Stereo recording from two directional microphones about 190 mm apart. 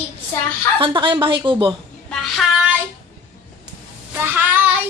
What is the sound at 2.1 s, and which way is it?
Child singing, centre (ahead or behind).